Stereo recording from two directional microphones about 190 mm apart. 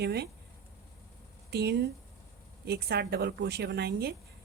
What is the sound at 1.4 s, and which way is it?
Speech, 60° right (ahead or behind).